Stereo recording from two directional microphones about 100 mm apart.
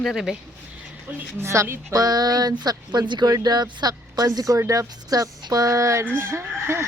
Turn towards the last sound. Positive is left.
turn(degrees=-25)  # may be behind; listen again after turning